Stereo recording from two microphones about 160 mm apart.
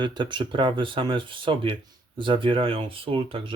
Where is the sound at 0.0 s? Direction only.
30° right (ahead or behind).